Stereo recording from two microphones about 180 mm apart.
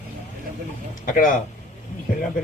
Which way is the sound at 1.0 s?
50° left (ahead or behind).